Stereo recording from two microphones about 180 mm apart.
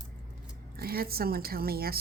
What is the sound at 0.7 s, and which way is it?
Speech, 55° right (ahead or behind).